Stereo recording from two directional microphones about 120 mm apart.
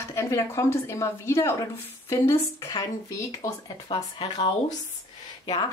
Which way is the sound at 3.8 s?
45° left (ahead or behind).